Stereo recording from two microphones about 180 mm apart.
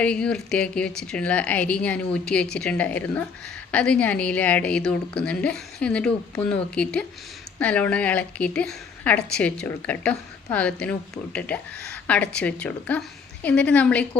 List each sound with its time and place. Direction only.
0.0 s a woman's voice: 5° left (ahead or behind)